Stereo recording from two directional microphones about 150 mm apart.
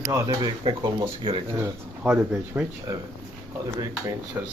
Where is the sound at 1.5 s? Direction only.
15° right (ahead or behind).